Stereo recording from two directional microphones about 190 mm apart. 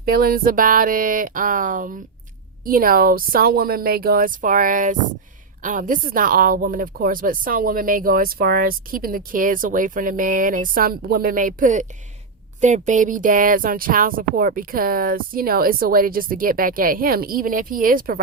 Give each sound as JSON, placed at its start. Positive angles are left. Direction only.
{"t": 0.0, "sound": "speech", "side_deg": -50}